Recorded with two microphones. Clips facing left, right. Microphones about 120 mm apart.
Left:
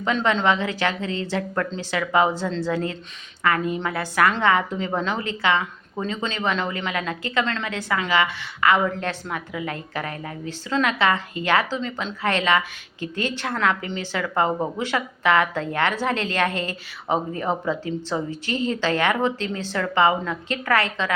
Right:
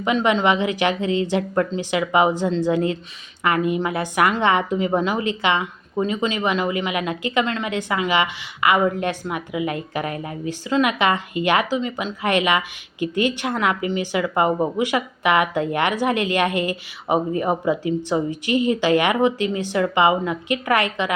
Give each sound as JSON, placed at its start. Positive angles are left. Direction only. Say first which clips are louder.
{"t": 0.0, "sound": "a woman's voice", "louder": "right 3 dB", "side_deg": -10}